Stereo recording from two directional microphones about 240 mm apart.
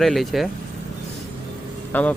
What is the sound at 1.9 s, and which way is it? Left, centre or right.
Speech, centre.